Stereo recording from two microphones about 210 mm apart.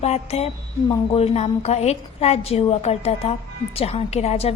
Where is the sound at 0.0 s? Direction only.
30° left (ahead or behind).